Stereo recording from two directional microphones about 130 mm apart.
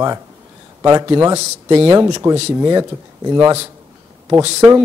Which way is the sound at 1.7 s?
45° right (ahead or behind).